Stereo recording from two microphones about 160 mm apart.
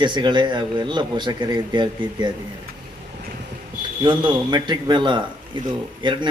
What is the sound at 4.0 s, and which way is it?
Speech, 30° right (ahead or behind).